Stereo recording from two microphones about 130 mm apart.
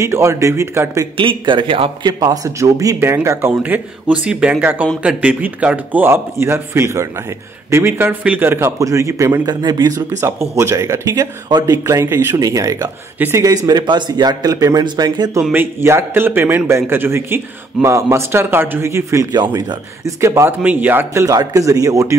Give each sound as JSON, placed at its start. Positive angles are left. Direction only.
{"t": 0.0, "sound": "speech", "side_deg": -20}
{"t": 1.1, "sound": "speech", "side_deg": -40}
{"t": 2.1, "sound": "speech", "side_deg": -25}
{"t": 9.6, "sound": "speech", "side_deg": -35}
{"t": 13.7, "sound": "speech", "side_deg": -35}
{"t": 15.5, "sound": "speech", "side_deg": -15}
{"t": 19.3, "sound": "speech", "side_deg": -35}